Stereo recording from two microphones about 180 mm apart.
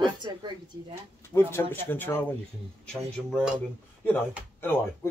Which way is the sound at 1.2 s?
15° left (ahead or behind).